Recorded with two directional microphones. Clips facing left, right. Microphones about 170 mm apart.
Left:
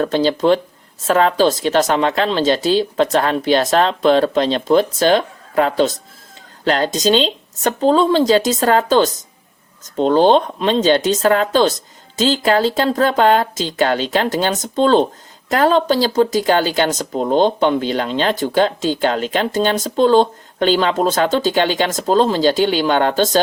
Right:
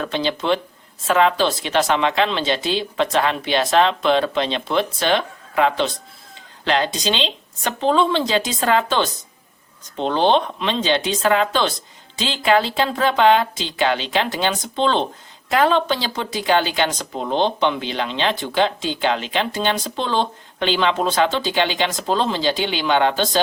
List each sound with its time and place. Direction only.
0.0 s speech: 40° left (ahead or behind)